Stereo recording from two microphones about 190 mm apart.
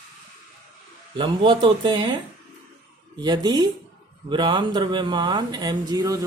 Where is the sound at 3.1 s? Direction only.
20° right (ahead or behind).